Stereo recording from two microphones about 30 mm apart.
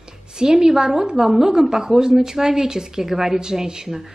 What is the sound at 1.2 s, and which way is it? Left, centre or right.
A woman's voice, centre.